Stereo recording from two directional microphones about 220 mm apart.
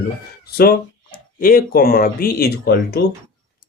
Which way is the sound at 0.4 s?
45° left (ahead or behind).